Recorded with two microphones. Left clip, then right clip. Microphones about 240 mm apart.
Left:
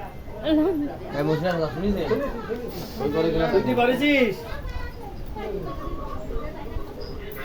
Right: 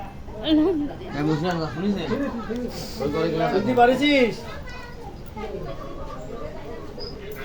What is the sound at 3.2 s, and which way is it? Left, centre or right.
Speech, left.